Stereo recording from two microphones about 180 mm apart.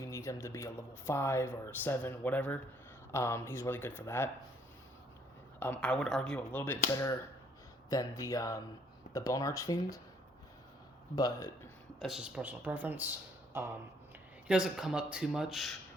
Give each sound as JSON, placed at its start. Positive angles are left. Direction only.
{"t": 0.0, "sound": "speech", "side_deg": 15}
{"t": 5.5, "sound": "a man's voice", "side_deg": 10}
{"t": 11.1, "sound": "speech", "side_deg": 20}
{"t": 11.9, "sound": "a man's voice", "side_deg": 0}